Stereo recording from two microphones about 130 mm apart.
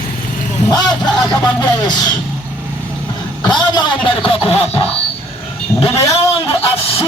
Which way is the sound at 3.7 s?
40° left (ahead or behind).